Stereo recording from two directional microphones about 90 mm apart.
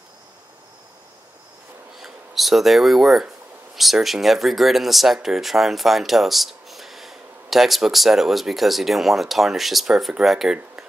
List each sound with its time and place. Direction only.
2.0 s speech: centre (ahead or behind)